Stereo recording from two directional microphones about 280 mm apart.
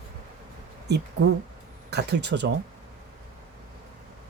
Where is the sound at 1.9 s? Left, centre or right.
Right.